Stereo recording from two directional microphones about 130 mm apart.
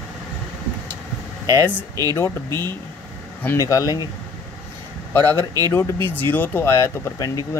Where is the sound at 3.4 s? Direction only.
25° left (ahead or behind).